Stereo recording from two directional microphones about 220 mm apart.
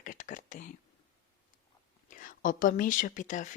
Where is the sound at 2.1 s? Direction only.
35° left (ahead or behind).